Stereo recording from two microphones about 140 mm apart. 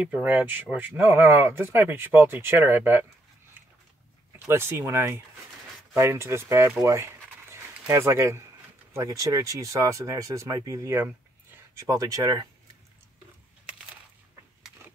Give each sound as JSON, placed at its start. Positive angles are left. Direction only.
{"t": 0.0, "sound": "speech", "side_deg": -10}
{"t": 4.5, "sound": "speech", "side_deg": -15}